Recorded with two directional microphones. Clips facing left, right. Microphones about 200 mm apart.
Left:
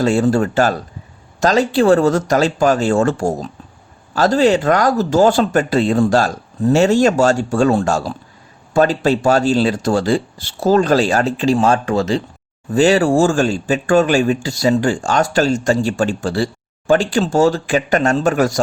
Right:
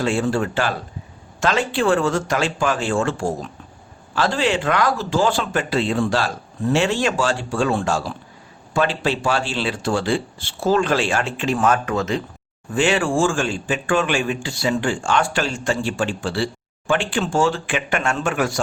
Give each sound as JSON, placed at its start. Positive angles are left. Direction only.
{"t": 0.0, "sound": "speech", "side_deg": 40}